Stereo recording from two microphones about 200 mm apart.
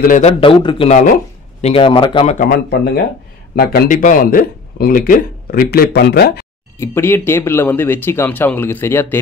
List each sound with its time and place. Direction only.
0.0 s a man's voice: 40° left (ahead or behind)
0.4 s a man's voice: 25° left (ahead or behind)
2.3 s speech: 45° left (ahead or behind)
6.8 s speech: 10° left (ahead or behind)